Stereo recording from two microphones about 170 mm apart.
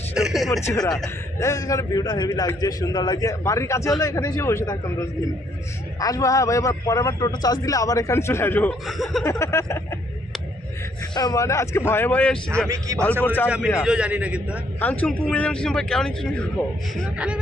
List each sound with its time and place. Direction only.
0.1 s a sound: 5° right (ahead or behind)
0.6 s a man's voice: 20° left (ahead or behind)
8.9 s speech: centre (ahead or behind)
9.2 s speech: 15° left (ahead or behind)
11.1 s speech: 25° left (ahead or behind)
12.6 s a man's voice: 20° right (ahead or behind)
13.2 s speech: 10° left (ahead or behind)
13.8 s a man's voice: 5° right (ahead or behind)
14.8 s speech: 10° left (ahead or behind)
17.2 s a man's voice: 5° right (ahead or behind)